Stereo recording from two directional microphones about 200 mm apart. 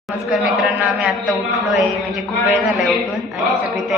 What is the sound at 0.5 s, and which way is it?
Chant, centre (ahead or behind).